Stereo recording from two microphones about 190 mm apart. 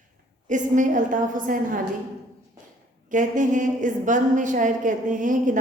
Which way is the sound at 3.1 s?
40° right (ahead or behind).